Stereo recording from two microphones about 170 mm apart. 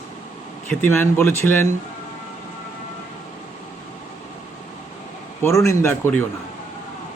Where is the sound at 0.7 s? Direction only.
10° left (ahead or behind).